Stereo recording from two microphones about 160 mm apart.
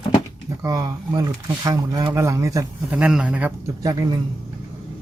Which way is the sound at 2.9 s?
5° right (ahead or behind).